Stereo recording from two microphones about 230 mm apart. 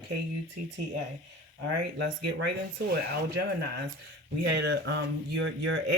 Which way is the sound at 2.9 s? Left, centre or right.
Right.